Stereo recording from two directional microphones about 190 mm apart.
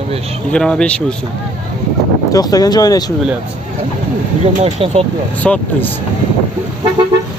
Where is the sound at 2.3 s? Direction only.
20° left (ahead or behind).